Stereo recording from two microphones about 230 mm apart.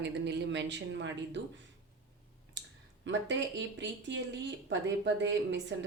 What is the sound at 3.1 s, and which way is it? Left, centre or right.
Speech, right.